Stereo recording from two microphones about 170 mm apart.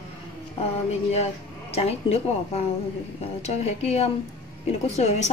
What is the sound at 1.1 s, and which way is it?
Speech, 35° left (ahead or behind).